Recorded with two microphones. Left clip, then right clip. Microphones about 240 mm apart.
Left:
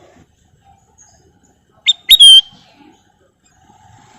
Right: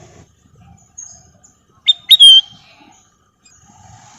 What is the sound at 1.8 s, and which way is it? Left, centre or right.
Bird, left.